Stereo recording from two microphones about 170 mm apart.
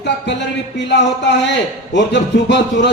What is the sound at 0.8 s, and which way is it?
Music, 90° left.